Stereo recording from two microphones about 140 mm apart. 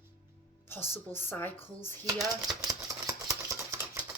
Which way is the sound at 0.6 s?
15° left (ahead or behind).